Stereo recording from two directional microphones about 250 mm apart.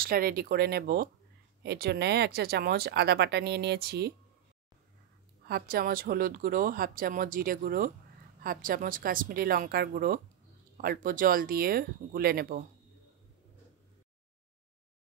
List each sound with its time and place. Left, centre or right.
0.0 s speech: right
5.5 s speech: right